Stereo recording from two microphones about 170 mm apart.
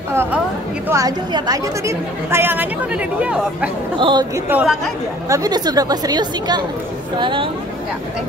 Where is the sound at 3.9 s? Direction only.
25° right (ahead or behind).